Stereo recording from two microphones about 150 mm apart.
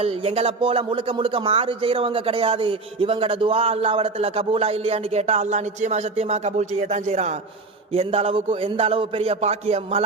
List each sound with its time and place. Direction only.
0.0 s a man's voice: 40° right (ahead or behind)